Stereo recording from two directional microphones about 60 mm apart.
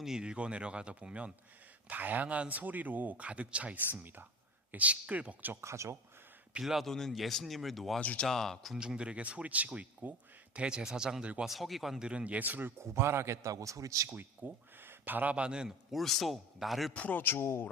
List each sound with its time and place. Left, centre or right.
0.0 s speech: centre; by 5.5 s right
5.6 s speech: right
6.6 s speech: centre
8.0 s speech: left
8.3 s speech: centre
8.7 s speech: centre
12.0 s speech: right
12.8 s a man's voice: right
14.1 s speech: right; by 15.7 s centre
15.9 s speech: centre
16.9 s speech: left
17.2 s a man's voice: left